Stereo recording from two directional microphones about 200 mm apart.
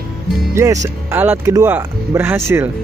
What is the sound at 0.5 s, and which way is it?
Speech, 15° right (ahead or behind).